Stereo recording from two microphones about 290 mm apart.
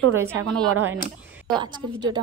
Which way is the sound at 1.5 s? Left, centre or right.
Centre.